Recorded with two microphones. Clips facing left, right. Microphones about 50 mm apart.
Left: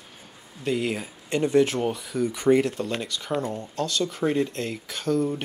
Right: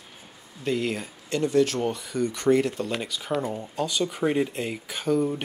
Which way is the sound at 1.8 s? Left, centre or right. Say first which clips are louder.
Left 1 dB; centre.